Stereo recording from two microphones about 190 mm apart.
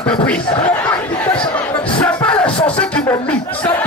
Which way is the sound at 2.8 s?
5° left (ahead or behind).